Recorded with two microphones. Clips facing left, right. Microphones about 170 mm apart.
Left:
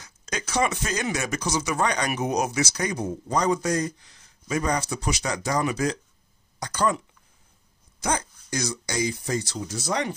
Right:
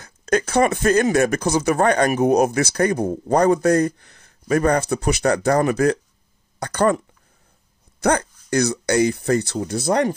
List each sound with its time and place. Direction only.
0.0 s speech: 55° right (ahead or behind)
8.0 s speech: 65° right (ahead or behind)